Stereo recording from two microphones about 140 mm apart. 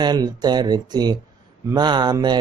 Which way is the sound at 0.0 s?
30° right (ahead or behind).